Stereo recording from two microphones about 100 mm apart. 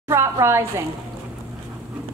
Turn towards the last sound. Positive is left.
turn(degrees=-25)  # may be behind; listen again after turning